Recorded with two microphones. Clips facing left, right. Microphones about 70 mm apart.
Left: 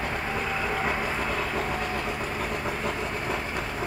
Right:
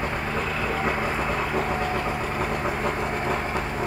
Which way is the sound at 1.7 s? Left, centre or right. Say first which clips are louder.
Right 4 dB; right.